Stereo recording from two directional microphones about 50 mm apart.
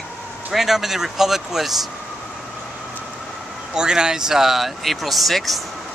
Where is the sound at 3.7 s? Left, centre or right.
Centre.